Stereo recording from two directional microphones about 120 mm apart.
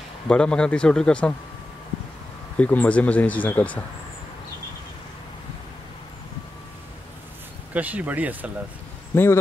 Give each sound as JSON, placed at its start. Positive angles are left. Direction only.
{"t": 0.3, "sound": "speech", "side_deg": 10}
{"t": 2.5, "sound": "speech", "side_deg": 15}
{"t": 7.7, "sound": "speech", "side_deg": -15}
{"t": 9.1, "sound": "speech", "side_deg": 20}